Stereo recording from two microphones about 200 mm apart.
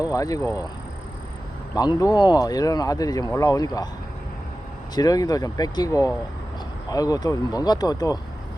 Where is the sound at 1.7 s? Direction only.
20° left (ahead or behind).